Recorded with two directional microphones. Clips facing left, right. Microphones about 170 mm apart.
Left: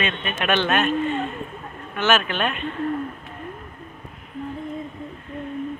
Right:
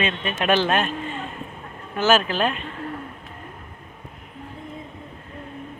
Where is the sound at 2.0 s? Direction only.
30° right (ahead or behind).